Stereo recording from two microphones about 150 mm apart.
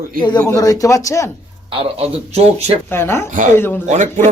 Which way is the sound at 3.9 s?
55° right (ahead or behind).